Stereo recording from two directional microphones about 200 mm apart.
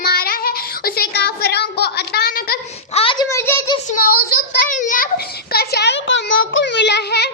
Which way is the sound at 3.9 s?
50° left (ahead or behind).